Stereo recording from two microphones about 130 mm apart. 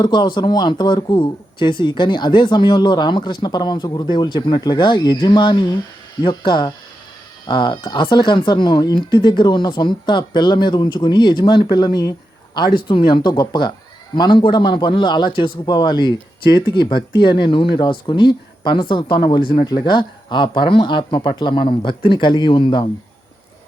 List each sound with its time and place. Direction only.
0.0 s speech: 35° left (ahead or behind)